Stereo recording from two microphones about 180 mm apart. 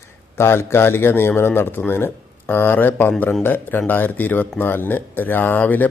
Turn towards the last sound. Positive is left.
turn(degrees=10)  # may be behind; listen again after turning